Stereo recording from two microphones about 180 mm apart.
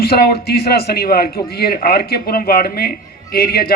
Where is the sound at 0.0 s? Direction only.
60° left (ahead or behind).